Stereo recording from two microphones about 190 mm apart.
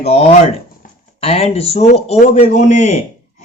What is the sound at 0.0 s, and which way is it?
Speech, 35° left (ahead or behind).